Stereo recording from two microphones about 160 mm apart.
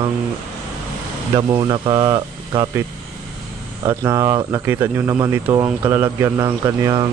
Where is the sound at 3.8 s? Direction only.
20° right (ahead or behind).